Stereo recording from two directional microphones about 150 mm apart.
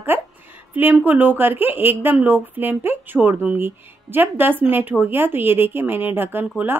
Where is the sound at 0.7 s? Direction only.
10° right (ahead or behind).